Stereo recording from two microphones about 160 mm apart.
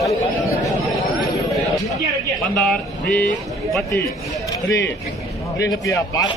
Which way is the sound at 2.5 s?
5° left (ahead or behind).